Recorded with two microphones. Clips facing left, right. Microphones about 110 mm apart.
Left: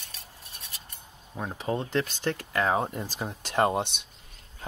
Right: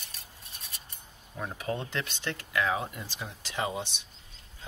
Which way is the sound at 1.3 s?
30° left (ahead or behind).